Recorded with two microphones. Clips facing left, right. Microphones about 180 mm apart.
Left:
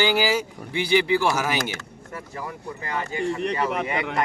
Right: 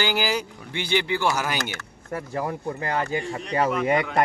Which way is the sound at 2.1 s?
50° right (ahead or behind).